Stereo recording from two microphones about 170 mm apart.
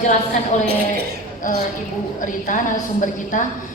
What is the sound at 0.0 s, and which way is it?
A woman's voice, 45° left (ahead or behind).